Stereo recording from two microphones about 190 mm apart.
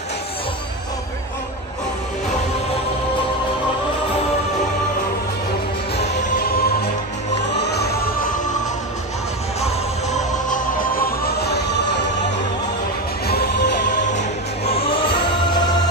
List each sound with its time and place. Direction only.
5.9 s music: 40° left (ahead or behind); by 7.9 s 60° left (ahead or behind)
9.6 s music: 35° left (ahead or behind); by 12.0 s 60° left (ahead or behind)
13.3 s music: 55° left (ahead or behind)
13.9 s music: 40° left (ahead or behind)